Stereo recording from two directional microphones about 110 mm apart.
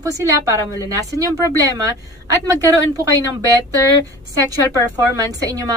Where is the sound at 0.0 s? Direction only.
30° right (ahead or behind).